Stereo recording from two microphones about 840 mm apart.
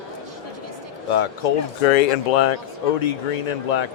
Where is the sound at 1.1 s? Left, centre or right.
Left.